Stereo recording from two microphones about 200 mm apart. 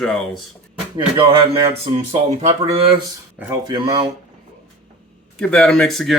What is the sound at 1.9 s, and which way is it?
Speech, 35° right (ahead or behind).